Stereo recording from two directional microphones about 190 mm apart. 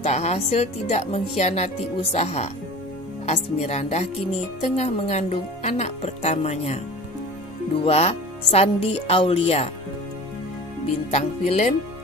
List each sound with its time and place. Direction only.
0.0 s speech: 35° left (ahead or behind)
7.8 s speech: 35° left (ahead or behind)
11.1 s speech: 35° left (ahead or behind)